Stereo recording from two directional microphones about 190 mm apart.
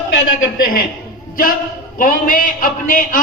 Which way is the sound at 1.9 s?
45° left (ahead or behind).